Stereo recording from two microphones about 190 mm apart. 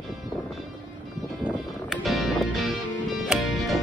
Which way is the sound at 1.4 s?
Centre (ahead or behind).